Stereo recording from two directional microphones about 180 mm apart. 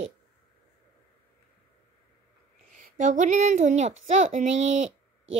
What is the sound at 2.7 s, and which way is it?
A woman's voice, 45° right (ahead or behind).